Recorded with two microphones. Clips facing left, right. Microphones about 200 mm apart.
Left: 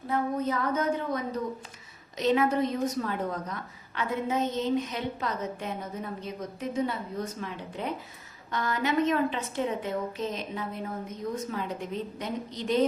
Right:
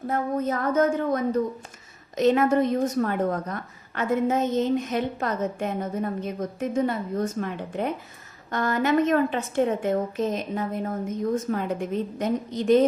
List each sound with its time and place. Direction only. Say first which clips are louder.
0.1 s a woman's voice: right 2 dB; 50° right (ahead or behind)